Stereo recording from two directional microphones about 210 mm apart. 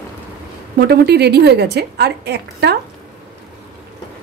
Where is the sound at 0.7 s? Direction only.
50° right (ahead or behind).